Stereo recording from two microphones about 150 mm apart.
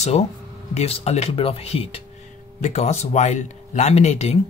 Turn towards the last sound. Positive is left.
turn(degrees=45)  # may be behind; listen again after turning